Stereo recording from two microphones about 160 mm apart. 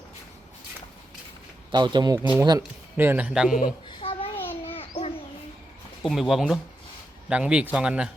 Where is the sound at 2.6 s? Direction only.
10° right (ahead or behind).